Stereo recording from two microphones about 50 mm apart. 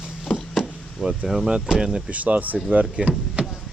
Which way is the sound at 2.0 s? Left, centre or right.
Right.